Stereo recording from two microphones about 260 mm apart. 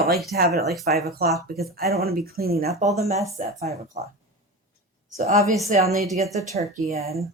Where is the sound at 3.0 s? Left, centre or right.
Right.